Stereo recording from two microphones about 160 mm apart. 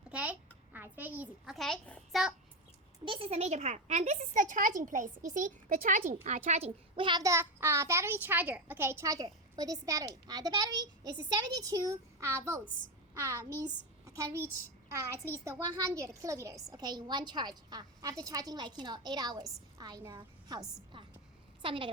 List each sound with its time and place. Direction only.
0.1 s a sound: 10° right (ahead or behind)
1.5 s a child's voice: 5° left (ahead or behind)
3.0 s a woman's voice: 35° right (ahead or behind)